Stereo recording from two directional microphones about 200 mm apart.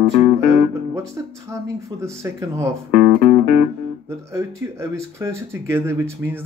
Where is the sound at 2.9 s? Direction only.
45° left (ahead or behind).